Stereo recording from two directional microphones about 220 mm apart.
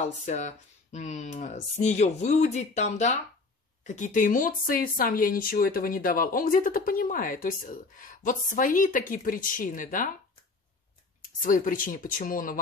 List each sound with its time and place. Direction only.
0.0 s speech: 35° left (ahead or behind)
11.4 s speech: 40° left (ahead or behind)